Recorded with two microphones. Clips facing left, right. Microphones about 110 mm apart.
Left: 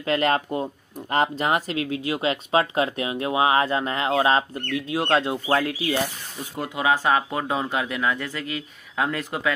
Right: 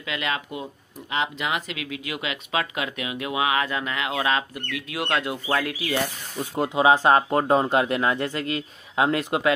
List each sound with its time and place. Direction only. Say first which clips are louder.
0.0 s speech: left 7 dB; 40° left (ahead or behind); by 5.9 s 25° left (ahead or behind)
6.5 s speech: right 4 dB; 25° right (ahead or behind)
8.9 s speech: right 4 dB; 20° right (ahead or behind)